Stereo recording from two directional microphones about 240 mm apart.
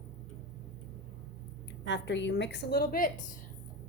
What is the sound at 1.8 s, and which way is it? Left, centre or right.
A woman's voice, left.